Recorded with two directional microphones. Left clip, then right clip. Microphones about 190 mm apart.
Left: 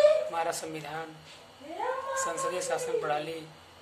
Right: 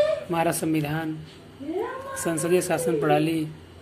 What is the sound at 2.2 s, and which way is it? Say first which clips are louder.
Speech: right 7 dB; 30° right (ahead or behind).